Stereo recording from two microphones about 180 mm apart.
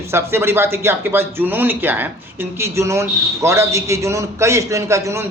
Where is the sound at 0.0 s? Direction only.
15° right (ahead or behind).